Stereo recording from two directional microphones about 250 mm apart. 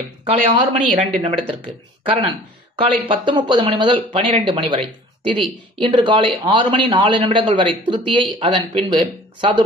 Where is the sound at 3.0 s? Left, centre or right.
Centre.